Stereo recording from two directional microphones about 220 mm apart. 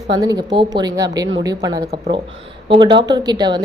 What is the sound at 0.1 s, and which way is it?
Speech, 20° right (ahead or behind).